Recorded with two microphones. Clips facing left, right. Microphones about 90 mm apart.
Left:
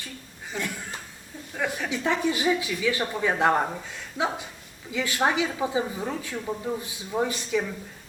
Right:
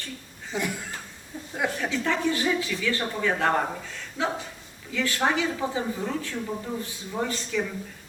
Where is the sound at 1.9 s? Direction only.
15° left (ahead or behind).